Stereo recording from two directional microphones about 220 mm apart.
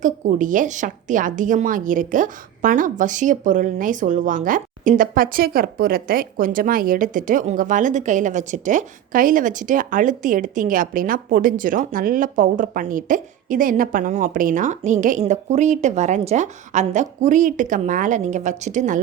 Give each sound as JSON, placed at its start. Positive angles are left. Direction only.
{"t": 0.0, "sound": "a woman's voice", "side_deg": -35}